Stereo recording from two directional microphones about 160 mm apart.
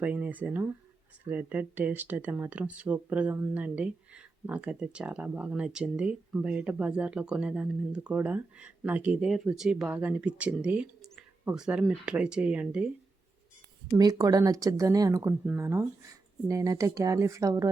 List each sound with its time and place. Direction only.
0.0 s speech: 10° right (ahead or behind)
11.0 s a sound: 15° right (ahead or behind)
11.5 s speech: 5° right (ahead or behind)
13.9 s speech: 25° right (ahead or behind)